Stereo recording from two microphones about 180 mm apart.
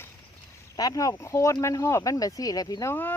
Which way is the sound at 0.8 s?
20° left (ahead or behind).